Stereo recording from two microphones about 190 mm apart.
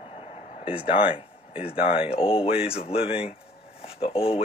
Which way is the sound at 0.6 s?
30° left (ahead or behind).